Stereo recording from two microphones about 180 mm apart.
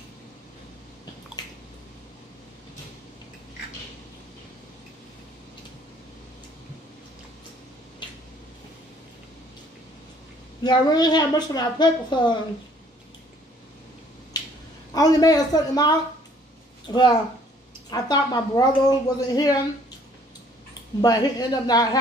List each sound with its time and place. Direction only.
10.6 s a woman's voice: 25° left (ahead or behind)
14.3 s a sound: 20° left (ahead or behind)
15.0 s a woman's voice: 20° left (ahead or behind)
21.0 s a woman's voice: 20° left (ahead or behind)